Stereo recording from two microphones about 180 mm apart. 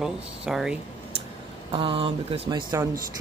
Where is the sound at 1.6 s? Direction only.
30° right (ahead or behind).